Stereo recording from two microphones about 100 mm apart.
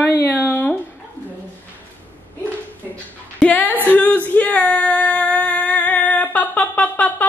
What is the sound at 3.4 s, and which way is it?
Female singing, 15° left (ahead or behind).